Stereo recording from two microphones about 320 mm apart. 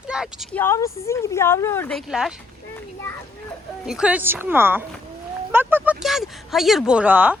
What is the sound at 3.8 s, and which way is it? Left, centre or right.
Speech, centre.